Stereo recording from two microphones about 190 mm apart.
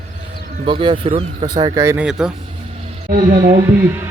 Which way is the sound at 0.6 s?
25° right (ahead or behind).